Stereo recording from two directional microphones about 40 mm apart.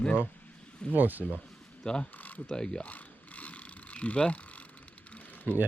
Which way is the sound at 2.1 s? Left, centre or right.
Left.